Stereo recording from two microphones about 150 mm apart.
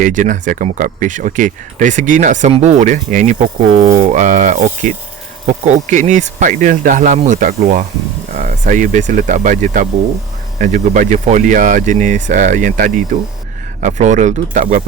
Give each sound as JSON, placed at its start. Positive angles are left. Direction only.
{"t": 0.0, "sound": "speech", "side_deg": -60}